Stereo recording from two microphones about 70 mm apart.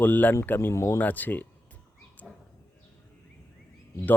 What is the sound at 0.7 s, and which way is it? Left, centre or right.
Speech, left.